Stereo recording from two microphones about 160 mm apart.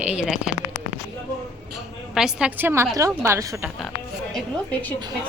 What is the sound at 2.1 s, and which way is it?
A woman's voice, 5° right (ahead or behind).